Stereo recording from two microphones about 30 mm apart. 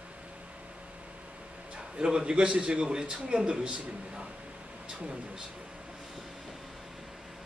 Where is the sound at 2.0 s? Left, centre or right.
Right.